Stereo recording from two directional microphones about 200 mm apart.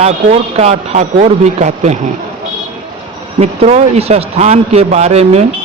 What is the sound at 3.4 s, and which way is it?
A man's voice, 30° right (ahead or behind).